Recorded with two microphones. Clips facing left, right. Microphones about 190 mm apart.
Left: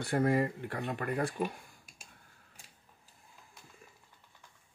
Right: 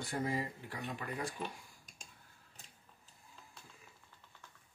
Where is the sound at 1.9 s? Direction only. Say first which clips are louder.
Even; 10° left (ahead or behind).